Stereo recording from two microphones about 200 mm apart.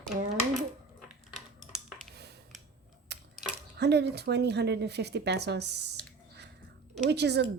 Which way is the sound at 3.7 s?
55° right (ahead or behind).